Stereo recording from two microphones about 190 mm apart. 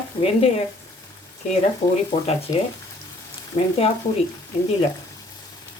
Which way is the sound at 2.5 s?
30° left (ahead or behind).